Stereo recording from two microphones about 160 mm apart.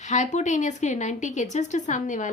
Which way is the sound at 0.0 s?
45° left (ahead or behind).